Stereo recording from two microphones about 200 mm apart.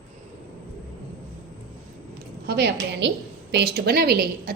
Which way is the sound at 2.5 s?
60° right (ahead or behind).